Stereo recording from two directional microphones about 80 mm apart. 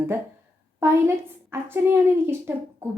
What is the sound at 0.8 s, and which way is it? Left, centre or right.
A woman's voice, right.